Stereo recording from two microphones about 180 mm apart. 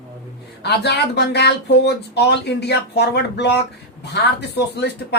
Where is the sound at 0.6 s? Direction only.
65° left (ahead or behind).